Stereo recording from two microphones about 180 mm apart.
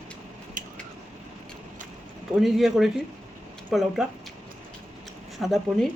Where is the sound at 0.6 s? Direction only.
45° right (ahead or behind).